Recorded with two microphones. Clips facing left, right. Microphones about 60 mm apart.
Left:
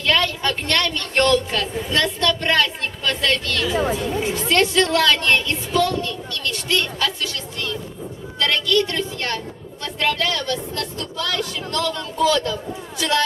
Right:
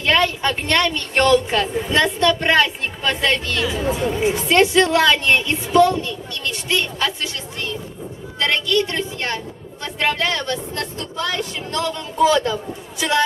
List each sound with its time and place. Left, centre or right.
0.0 s a woman's voice: right
8.4 s a woman's voice: right